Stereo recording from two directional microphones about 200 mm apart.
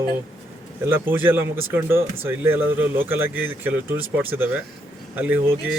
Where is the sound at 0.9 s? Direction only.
10° right (ahead or behind).